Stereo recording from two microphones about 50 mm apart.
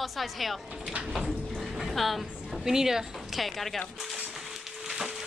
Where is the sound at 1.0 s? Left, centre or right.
Centre.